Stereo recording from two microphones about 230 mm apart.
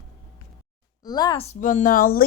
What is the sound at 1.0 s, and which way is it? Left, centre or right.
A woman's voice, centre.